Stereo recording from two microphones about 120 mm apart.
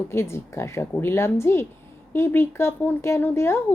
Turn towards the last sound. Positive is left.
turn(degrees=20)  # may be behind; listen again after turning